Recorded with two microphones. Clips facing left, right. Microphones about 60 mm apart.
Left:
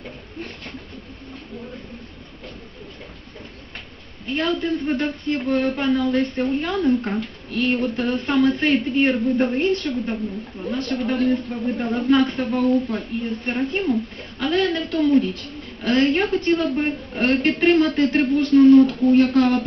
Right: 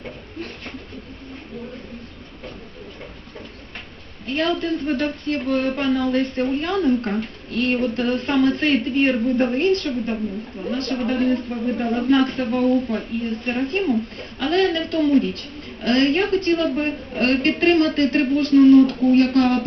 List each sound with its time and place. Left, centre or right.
4.3 s a man's voice: centre
15.8 s speech: centre